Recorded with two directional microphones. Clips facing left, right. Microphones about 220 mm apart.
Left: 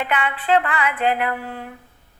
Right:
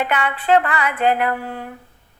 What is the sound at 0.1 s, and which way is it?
A woman's voice, 40° right (ahead or behind).